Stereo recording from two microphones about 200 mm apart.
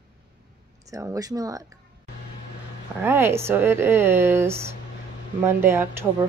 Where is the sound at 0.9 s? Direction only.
15° right (ahead or behind).